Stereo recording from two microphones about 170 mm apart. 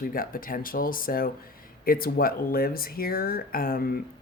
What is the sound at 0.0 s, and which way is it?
Speech, 55° left (ahead or behind).